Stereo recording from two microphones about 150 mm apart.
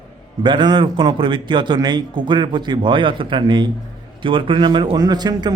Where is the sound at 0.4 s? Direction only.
30° right (ahead or behind).